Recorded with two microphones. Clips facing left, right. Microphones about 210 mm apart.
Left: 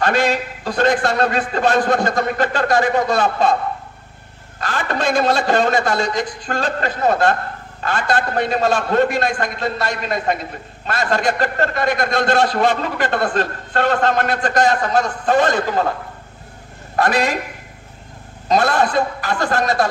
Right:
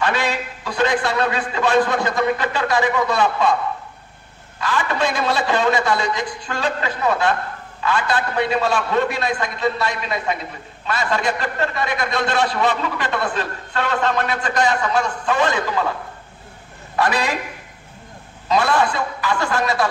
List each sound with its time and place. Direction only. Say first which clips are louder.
0.0 s a man's voice: left 4 dB; 45° left (ahead or behind)
4.6 s a man's voice: left 1 dB; 40° left (ahead or behind)
16.9 s a man's voice: left 3 dB; 45° left (ahead or behind)
18.5 s a man's voice: left 2 dB; 40° left (ahead or behind)